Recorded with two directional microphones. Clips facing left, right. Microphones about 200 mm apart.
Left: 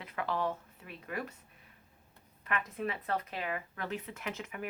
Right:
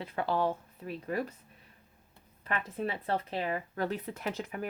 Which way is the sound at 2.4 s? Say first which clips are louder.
Right 2 dB; 30° right (ahead or behind).